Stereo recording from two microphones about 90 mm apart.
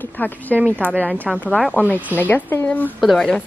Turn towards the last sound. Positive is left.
turn(degrees=5)  # may be behind; listen again after turning